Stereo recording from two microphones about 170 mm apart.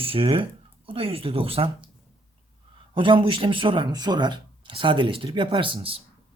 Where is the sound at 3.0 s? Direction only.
30° right (ahead or behind).